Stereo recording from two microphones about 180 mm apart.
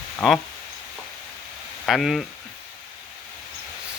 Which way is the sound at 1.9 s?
Centre (ahead or behind).